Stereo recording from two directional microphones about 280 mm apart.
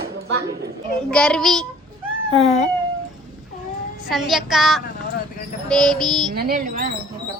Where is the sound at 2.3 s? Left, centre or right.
Left.